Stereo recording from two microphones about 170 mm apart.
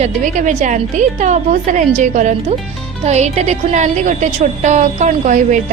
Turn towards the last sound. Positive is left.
turn(degrees=-45)  # may be behind; listen again after turning